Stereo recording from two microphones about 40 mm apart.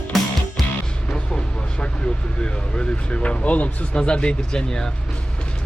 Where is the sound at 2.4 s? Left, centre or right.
Left.